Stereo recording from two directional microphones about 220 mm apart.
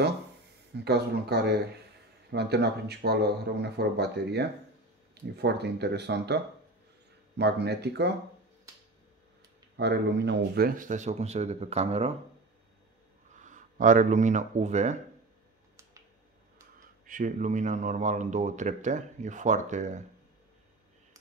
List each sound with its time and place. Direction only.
0.8 s speech: 45° right (ahead or behind)
9.8 s speech: 50° right (ahead or behind); by 12.2 s 30° right (ahead or behind)
13.4 s speech: 35° right (ahead or behind)
17.0 s speech: 35° right (ahead or behind)